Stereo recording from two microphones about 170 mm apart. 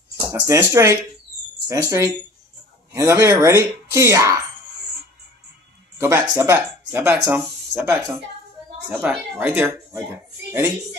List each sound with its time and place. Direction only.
0.3 s speech: 15° right (ahead or behind)
5.9 s speech: 15° right (ahead or behind)
9.0 s speech: 10° right (ahead or behind)